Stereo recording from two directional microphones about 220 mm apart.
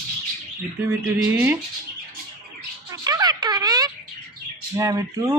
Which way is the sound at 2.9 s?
15° right (ahead or behind).